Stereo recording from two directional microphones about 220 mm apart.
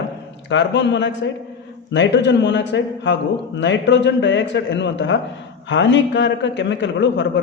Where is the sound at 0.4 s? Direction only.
55° left (ahead or behind).